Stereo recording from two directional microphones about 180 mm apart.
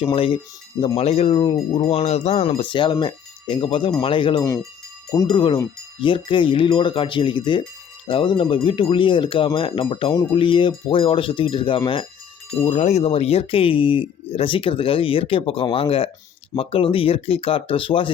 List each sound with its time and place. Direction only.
0.0 s speech: 30° left (ahead or behind)
2.0 s speech: 35° left (ahead or behind)